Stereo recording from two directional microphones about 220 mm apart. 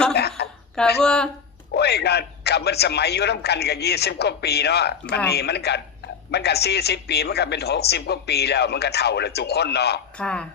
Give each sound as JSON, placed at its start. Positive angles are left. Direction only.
{"t": 0.1, "sound": "a sound", "side_deg": 50}
{"t": 1.0, "sound": "speech", "side_deg": 5}
{"t": 1.7, "sound": "speech", "side_deg": 50}
{"t": 10.2, "sound": "speech", "side_deg": 5}